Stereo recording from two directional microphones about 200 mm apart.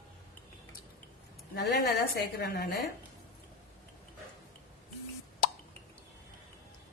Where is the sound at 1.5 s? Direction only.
55° left (ahead or behind).